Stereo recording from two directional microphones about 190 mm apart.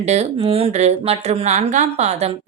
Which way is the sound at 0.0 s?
35° right (ahead or behind).